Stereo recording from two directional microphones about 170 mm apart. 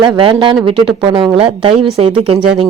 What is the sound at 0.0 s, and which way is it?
A woman's voice, 30° right (ahead or behind).